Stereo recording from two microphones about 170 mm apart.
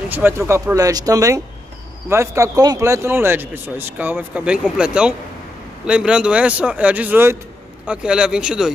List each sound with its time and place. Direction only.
0.1 s speech: 10° right (ahead or behind)